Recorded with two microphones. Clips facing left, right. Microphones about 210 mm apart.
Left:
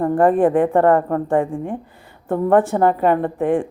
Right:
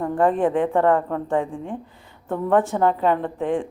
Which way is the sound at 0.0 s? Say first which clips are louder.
Left 5 dB; 55° left (ahead or behind).